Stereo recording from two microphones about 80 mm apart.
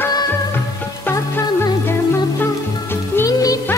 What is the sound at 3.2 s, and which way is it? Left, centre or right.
Music, left.